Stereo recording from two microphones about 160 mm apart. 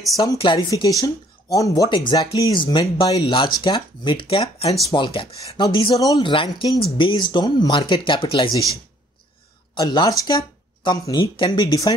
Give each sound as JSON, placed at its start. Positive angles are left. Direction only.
{"t": 0.2, "sound": "speech", "side_deg": 25}
{"t": 9.8, "sound": "speech", "side_deg": 25}